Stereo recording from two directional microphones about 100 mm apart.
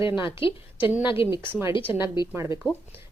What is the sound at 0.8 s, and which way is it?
A woman's voice, 20° right (ahead or behind).